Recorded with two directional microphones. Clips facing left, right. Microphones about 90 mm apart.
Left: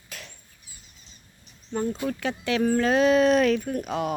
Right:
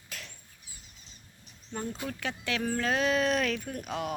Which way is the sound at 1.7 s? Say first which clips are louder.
Left 8 dB; 20° left (ahead or behind).